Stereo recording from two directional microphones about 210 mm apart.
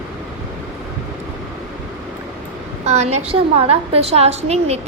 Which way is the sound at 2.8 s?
30° right (ahead or behind).